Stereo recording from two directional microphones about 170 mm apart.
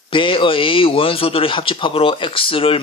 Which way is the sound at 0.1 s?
30° left (ahead or behind).